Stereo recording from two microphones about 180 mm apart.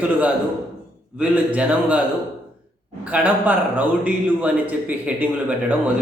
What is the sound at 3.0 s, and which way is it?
A man's voice, 10° right (ahead or behind).